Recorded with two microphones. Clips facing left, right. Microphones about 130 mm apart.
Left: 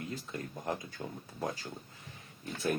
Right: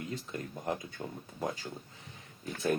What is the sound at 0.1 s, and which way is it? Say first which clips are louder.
Speech: right 1 dB; 30° right (ahead or behind).